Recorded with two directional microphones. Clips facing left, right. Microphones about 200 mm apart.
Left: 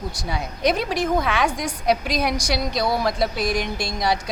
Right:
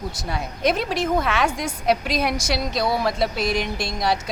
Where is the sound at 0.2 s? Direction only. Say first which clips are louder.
Left 1 dB; centre (ahead or behind).